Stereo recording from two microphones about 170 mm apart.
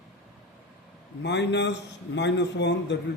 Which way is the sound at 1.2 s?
90° left.